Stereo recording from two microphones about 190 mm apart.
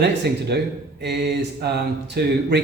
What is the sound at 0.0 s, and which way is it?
Speech, 60° right (ahead or behind).